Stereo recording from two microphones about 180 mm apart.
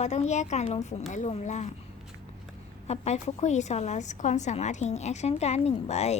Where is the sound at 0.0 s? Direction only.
40° left (ahead or behind).